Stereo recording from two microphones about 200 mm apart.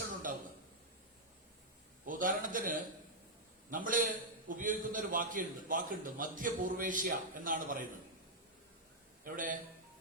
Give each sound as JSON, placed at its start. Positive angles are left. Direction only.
{"t": 0.3, "sound": "a sound", "side_deg": -40}
{"t": 2.0, "sound": "a man's voice", "side_deg": -40}
{"t": 9.2, "sound": "a man's voice", "side_deg": -40}